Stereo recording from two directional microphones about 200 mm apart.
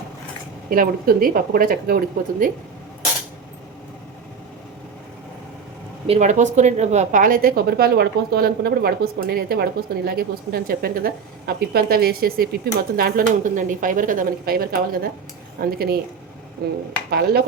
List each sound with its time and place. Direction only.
0.7 s a woman's voice: 45° right (ahead or behind)
6.1 s a woman's voice: 35° right (ahead or behind)
17.1 s a woman's voice: 50° right (ahead or behind)